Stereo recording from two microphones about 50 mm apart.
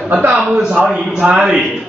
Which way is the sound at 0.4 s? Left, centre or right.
Centre.